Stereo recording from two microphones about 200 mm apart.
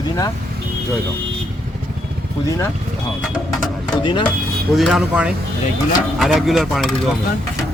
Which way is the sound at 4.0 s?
25° left (ahead or behind).